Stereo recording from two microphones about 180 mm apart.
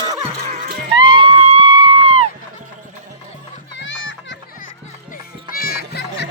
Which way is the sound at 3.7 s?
90° left.